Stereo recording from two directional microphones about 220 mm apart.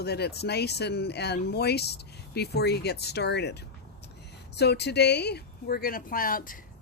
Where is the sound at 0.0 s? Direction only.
50° left (ahead or behind).